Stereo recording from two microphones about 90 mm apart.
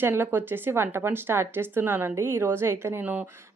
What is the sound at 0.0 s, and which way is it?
Speech, 25° right (ahead or behind).